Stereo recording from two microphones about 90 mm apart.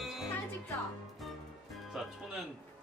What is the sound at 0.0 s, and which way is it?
Music, 5° right (ahead or behind).